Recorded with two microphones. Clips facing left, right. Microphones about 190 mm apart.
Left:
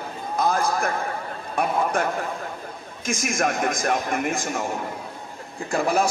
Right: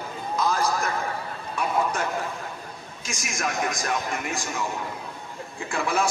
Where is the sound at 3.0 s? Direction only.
55° left (ahead or behind).